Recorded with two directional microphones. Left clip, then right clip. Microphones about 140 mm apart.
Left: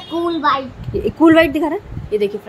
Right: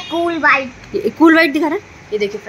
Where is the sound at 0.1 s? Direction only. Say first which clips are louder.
Right 2 dB; 20° right (ahead or behind).